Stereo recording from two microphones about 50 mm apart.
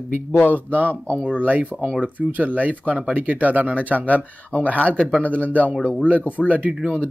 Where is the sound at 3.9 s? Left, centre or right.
Left.